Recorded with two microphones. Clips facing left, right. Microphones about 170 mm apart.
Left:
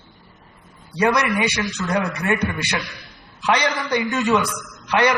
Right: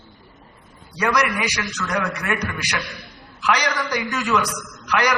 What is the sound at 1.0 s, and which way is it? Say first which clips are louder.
A man's voice: left 3 dB; 25° left (ahead or behind).